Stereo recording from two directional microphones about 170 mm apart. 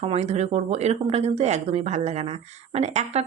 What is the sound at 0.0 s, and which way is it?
Speech, 40° right (ahead or behind).